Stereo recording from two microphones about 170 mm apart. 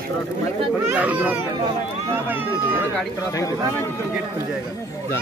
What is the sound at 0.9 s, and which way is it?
Speech, 10° right (ahead or behind).